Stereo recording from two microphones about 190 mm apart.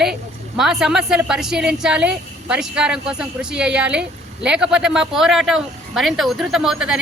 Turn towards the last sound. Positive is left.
turn(degrees=0)  # may be behind; listen again after turning